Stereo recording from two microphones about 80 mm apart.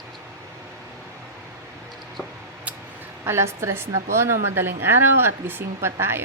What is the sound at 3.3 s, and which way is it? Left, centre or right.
A woman's voice, right.